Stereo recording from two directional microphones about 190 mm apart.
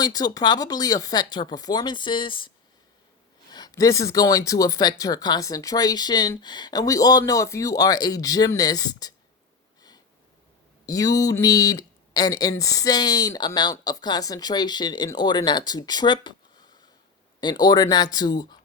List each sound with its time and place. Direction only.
0.0 s speech: 20° left (ahead or behind)
3.5 s speech: 20° left (ahead or behind)
10.8 s speech: 20° left (ahead or behind)